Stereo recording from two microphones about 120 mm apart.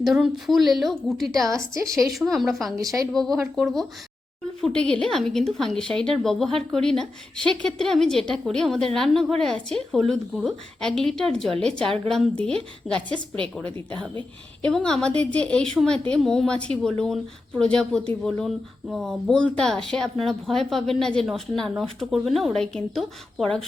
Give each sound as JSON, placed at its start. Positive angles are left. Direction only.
{"t": 0.0, "sound": "a woman's voice", "side_deg": 0}
{"t": 1.5, "sound": "a woman's voice", "side_deg": -25}
{"t": 2.0, "sound": "a woman's voice", "side_deg": 0}
{"t": 2.8, "sound": "a woman's voice", "side_deg": -30}
{"t": 3.1, "sound": "a woman's voice", "side_deg": 5}
{"t": 14.6, "sound": "a woman's voice", "side_deg": 5}